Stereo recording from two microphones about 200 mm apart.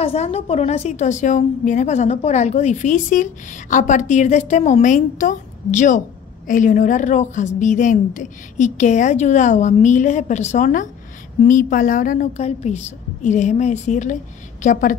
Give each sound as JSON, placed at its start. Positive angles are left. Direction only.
{"t": 0.0, "sound": "a woman's voice", "side_deg": 30}